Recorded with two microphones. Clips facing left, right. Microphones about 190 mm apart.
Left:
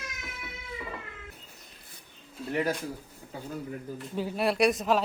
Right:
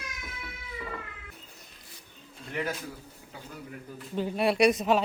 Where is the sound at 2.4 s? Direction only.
5° left (ahead or behind).